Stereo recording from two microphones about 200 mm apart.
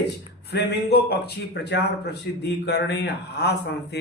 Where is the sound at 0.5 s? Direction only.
55° left (ahead or behind).